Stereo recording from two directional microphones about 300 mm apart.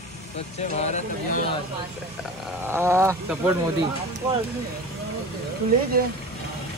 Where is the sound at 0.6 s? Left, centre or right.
Left.